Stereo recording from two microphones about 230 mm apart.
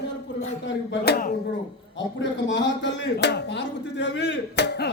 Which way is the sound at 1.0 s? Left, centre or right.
Left.